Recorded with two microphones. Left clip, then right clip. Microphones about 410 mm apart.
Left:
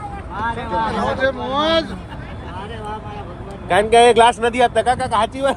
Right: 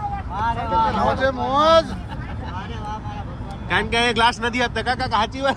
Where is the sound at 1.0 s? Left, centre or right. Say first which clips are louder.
Left 1 dB; right.